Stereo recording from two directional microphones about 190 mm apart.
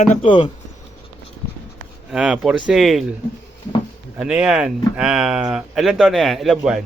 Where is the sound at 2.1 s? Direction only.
5° right (ahead or behind).